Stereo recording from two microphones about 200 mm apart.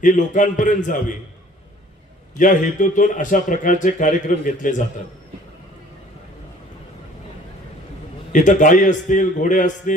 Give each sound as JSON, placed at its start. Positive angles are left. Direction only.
{"t": 0.0, "sound": "a man's voice", "side_deg": 40}
{"t": 2.4, "sound": "a man's voice", "side_deg": 40}
{"t": 8.3, "sound": "a man's voice", "side_deg": 40}